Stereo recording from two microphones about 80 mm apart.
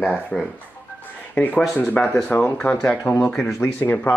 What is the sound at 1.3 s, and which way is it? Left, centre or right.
Speech, left.